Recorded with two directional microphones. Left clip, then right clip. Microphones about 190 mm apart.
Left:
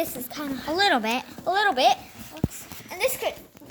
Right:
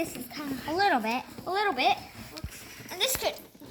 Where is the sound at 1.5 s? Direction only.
55° left (ahead or behind).